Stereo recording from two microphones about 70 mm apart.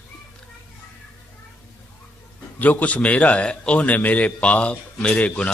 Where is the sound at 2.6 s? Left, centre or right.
Left.